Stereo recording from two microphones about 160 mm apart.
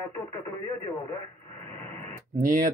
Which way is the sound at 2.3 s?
60° right (ahead or behind).